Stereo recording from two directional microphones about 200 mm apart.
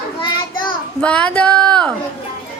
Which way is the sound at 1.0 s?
5° left (ahead or behind).